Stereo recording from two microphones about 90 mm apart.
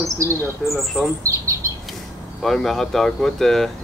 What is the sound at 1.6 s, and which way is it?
Bird, 35° right (ahead or behind).